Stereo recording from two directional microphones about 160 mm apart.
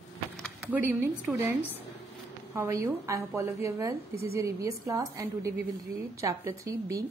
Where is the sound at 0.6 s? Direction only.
15° right (ahead or behind).